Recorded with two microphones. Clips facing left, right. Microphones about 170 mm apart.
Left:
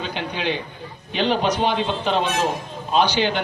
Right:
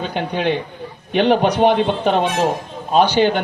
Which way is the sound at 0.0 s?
50° right (ahead or behind).